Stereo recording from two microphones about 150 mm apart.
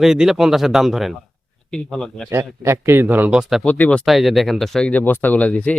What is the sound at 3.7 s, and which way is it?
Speech, 10° left (ahead or behind).